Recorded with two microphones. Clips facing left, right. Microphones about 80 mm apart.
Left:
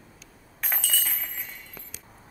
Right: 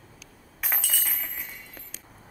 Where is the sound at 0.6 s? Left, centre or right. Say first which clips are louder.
Left 1 dB; centre.